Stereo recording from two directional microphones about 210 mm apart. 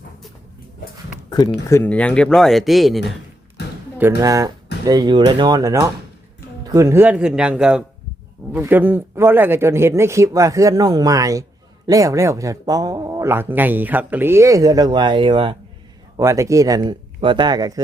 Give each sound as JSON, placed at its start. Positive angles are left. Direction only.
{"t": 1.7, "sound": "speech", "side_deg": 10}
{"t": 4.2, "sound": "speech", "side_deg": -15}